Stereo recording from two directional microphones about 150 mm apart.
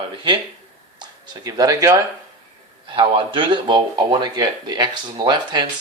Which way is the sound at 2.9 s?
35° right (ahead or behind).